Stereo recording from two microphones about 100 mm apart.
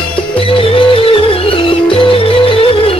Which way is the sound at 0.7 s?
65° left (ahead or behind).